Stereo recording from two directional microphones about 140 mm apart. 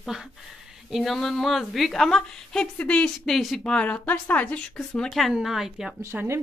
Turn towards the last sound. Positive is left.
turn(degrees=-5)  # may be behind; listen again after turning